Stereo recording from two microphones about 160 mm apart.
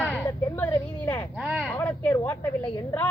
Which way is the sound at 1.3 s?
10° right (ahead or behind).